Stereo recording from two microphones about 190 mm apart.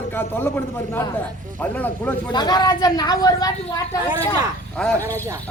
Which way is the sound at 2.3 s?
20° left (ahead or behind).